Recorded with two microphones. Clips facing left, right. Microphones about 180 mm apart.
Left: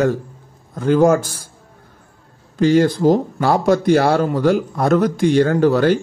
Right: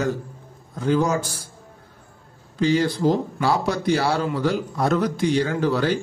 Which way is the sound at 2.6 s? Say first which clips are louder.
Left 6 dB; 50° left (ahead or behind).